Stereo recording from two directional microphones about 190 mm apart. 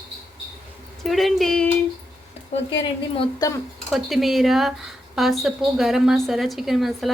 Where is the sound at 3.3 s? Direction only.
15° left (ahead or behind).